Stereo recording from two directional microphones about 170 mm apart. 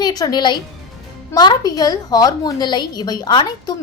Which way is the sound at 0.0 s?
25° left (ahead or behind).